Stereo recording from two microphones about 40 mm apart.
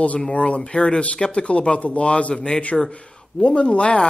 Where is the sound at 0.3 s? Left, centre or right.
Left.